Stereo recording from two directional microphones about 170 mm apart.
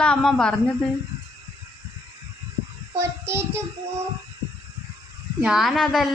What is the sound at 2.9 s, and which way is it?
Speech, 15° right (ahead or behind).